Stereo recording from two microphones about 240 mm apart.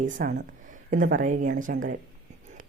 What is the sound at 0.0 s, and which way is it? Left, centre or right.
A woman's voice, right.